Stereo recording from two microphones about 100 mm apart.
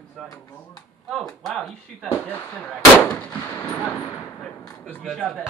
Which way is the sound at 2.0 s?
25° left (ahead or behind).